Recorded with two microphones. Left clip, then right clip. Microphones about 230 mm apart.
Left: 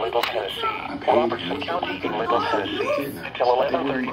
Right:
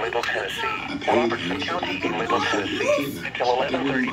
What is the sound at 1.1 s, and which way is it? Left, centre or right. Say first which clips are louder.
Speech: left 2 dB; right.